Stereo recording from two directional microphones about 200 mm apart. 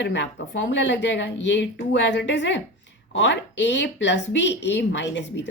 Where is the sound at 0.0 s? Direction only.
65° left (ahead or behind).